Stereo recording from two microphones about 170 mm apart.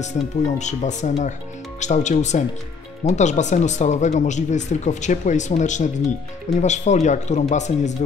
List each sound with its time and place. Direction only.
0.6 s speech: 45° left (ahead or behind)